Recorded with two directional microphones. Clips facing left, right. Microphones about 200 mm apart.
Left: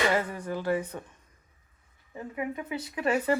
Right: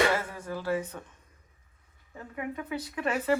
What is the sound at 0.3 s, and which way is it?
Speech, 15° left (ahead or behind).